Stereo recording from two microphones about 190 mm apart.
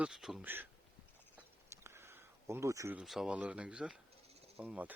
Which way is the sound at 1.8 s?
15° right (ahead or behind).